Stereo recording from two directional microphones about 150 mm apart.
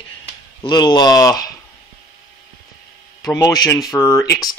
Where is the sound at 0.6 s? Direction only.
30° left (ahead or behind).